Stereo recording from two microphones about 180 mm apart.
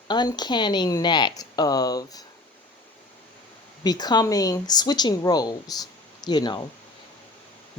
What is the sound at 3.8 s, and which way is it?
A woman's voice, 20° left (ahead or behind).